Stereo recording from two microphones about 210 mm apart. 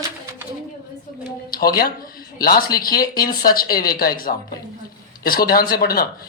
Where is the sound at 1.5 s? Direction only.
45° left (ahead or behind).